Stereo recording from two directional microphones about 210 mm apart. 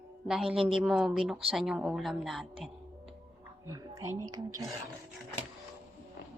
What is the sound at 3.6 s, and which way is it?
Speech, 15° right (ahead or behind).